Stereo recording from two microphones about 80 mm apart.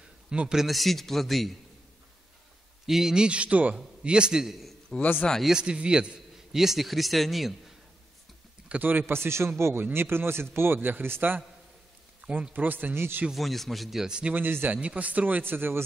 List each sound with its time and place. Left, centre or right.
0.3 s a man's voice: centre
2.9 s a man's voice: centre
4.8 s a sound: centre
5.4 s a man's voice: centre
8.6 s a man's voice: right
12.2 s a man's voice: centre
13.3 s a man's voice: centre
14.3 s a man's voice: right